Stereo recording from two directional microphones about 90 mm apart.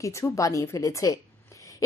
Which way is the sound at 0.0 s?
35° left (ahead or behind).